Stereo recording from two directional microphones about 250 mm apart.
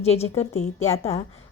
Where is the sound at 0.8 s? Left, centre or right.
Left.